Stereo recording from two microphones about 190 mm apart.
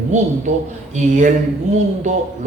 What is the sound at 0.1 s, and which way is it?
Speech, 40° right (ahead or behind).